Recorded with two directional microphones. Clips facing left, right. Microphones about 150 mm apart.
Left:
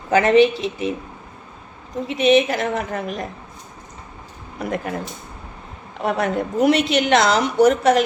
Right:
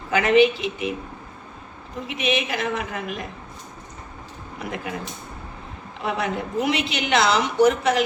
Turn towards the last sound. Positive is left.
turn(degrees=40)  # may be behind; listen again after turning